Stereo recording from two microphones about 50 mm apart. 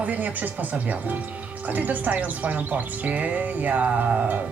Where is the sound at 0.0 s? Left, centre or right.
Right.